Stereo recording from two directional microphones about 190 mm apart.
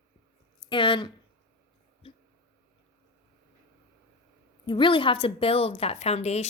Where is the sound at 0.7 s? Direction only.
25° left (ahead or behind).